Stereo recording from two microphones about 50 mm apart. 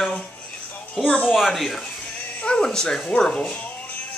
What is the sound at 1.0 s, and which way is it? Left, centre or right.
Speech, left.